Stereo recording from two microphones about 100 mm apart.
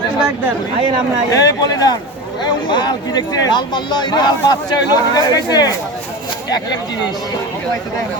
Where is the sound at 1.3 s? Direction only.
40° left (ahead or behind).